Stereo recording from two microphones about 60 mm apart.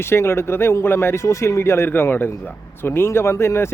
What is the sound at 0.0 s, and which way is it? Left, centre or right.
Speech, left.